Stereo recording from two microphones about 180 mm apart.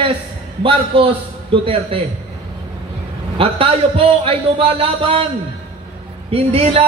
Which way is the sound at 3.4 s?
30° right (ahead or behind).